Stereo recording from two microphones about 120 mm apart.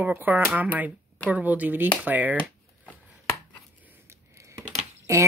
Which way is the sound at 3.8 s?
20° right (ahead or behind).